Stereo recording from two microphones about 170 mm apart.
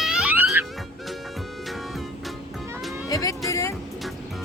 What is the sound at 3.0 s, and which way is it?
Music, 20° left (ahead or behind).